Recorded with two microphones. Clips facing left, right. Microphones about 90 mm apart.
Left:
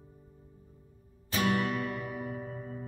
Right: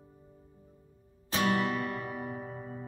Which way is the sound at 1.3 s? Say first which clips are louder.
Right 1 dB; 30° right (ahead or behind).